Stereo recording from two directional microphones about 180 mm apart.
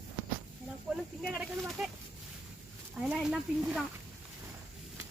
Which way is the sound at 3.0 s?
5° right (ahead or behind).